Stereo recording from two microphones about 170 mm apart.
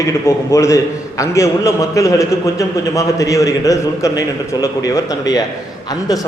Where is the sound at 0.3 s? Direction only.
20° left (ahead or behind).